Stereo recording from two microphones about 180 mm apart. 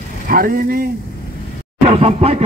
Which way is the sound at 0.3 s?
55° right (ahead or behind).